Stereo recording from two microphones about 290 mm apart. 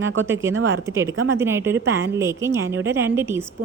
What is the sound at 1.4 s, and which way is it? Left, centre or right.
A woman's voice, centre.